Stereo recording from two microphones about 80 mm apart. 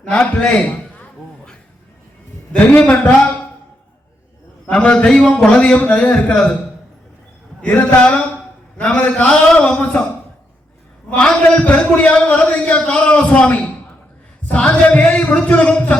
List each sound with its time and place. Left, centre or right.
0.1 s a man's voice: centre
2.5 s a man's voice: centre
4.6 s a man's voice: centre
6.3 s a man's voice: centre
7.6 s a man's voice: centre
11.2 s a man's voice: centre